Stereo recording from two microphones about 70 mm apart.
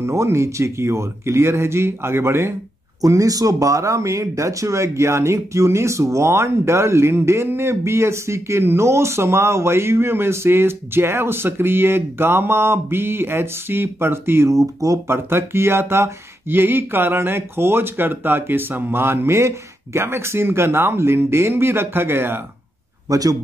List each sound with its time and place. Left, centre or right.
0.0 s speech: right
3.0 s speech: right
14.5 s speech: right
15.0 s speech: right
23.0 s a man's voice: right